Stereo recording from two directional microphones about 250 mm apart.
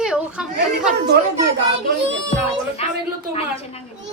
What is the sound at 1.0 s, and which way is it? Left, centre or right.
Speech, right.